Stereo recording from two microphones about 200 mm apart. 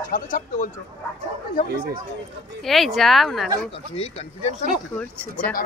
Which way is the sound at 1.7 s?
50° right (ahead or behind).